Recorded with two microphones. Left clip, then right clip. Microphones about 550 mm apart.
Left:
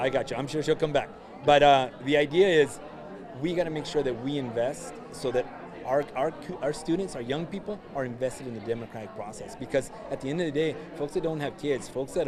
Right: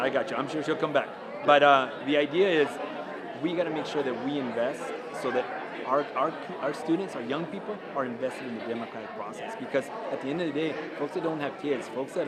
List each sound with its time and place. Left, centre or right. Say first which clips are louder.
0.0 s a man's voice: even; left
9.7 s a man's voice: left 1 dB; left